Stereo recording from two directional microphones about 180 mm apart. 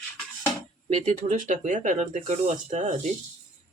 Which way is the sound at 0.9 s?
40° right (ahead or behind).